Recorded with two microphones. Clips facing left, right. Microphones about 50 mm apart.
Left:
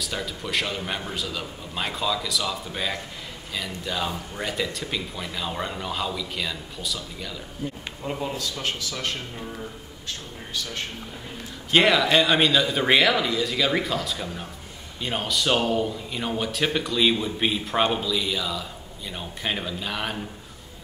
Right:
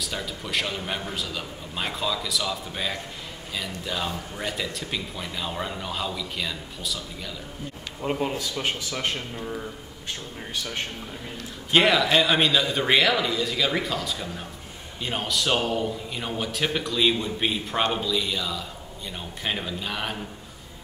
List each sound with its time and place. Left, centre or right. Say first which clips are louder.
0.0 s a man's voice: left 1 dB; centre
8.0 s a man's voice: right 3 dB; right
10.5 s a man's voice: even; right
11.7 s a man's voice: left 1 dB; centre